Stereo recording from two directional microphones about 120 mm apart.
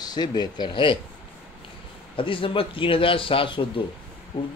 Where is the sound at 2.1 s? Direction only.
45° left (ahead or behind).